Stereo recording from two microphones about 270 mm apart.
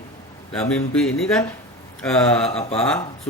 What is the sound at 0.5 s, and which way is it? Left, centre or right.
Speech, centre.